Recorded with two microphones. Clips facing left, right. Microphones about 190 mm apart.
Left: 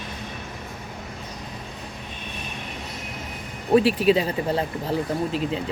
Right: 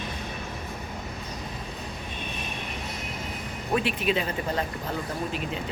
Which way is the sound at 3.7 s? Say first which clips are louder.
Left 8 dB; 35° left (ahead or behind).